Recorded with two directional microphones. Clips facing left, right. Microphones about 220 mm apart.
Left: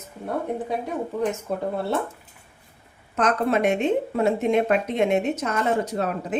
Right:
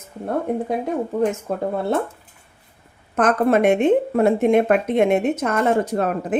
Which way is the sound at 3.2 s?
50° right (ahead or behind).